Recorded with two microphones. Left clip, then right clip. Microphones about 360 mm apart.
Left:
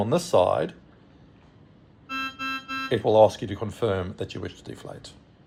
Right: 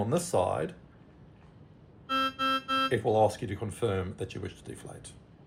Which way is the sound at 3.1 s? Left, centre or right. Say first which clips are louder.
Left 12 dB; left.